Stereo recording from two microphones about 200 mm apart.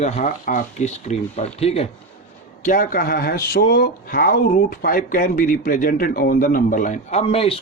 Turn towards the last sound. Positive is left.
turn(degrees=30)  # may be behind; listen again after turning